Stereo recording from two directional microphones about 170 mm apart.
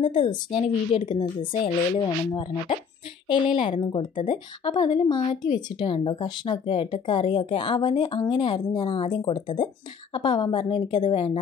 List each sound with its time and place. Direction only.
0.0 s speech: 30° left (ahead or behind)
4.1 s speech: 50° left (ahead or behind)
4.6 s speech: 30° left (ahead or behind)